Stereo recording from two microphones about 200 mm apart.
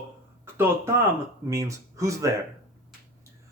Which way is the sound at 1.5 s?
15° right (ahead or behind).